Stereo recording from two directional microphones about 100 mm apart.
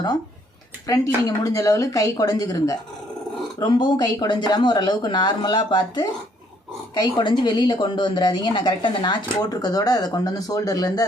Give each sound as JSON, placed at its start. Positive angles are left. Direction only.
{"t": 0.9, "sound": "speech", "side_deg": 35}
{"t": 9.4, "sound": "speech", "side_deg": 40}